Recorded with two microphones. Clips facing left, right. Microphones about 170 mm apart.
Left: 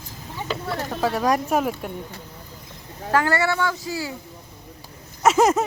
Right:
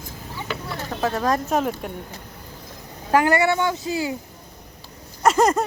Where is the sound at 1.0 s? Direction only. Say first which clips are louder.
Left 1 dB; 10° left (ahead or behind).